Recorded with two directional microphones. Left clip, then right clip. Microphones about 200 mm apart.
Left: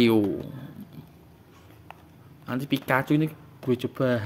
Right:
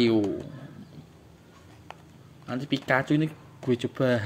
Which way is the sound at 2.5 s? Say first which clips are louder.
Left 1 dB; 20° left (ahead or behind).